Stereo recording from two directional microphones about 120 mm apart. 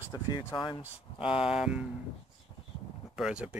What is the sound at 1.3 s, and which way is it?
Speech, 5° right (ahead or behind).